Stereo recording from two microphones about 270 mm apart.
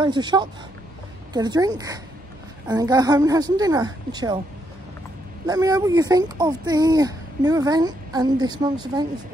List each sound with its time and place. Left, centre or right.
0.0 s speech: centre
5.5 s speech: centre